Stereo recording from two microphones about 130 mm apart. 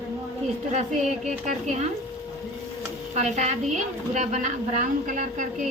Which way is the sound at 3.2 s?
60° right (ahead or behind).